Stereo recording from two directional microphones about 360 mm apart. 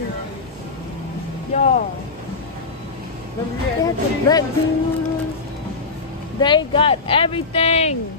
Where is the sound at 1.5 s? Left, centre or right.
Centre.